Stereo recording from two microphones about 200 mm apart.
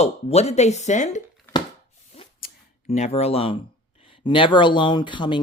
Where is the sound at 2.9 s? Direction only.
30° left (ahead or behind).